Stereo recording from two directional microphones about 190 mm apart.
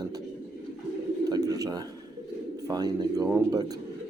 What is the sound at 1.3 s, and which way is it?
Speech, 20° right (ahead or behind).